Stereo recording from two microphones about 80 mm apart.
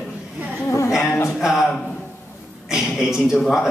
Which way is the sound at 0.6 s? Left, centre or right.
Left.